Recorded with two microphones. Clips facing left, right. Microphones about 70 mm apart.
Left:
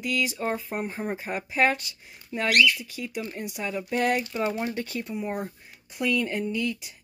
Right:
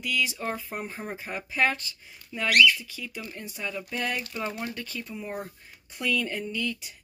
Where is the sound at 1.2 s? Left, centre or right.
Left.